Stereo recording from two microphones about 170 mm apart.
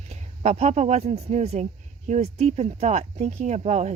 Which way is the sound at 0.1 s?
40° right (ahead or behind).